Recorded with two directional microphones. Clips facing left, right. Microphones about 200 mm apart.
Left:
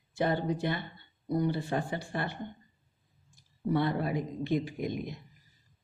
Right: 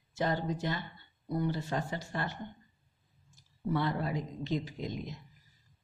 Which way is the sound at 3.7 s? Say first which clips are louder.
Left 3 dB; 15° left (ahead or behind).